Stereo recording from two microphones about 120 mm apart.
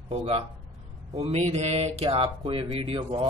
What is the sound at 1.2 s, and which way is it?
Speech, 65° right (ahead or behind).